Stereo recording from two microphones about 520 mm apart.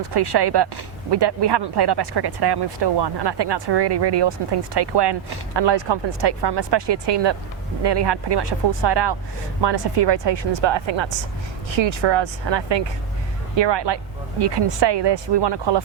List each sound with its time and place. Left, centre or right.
0.1 s a woman's voice: right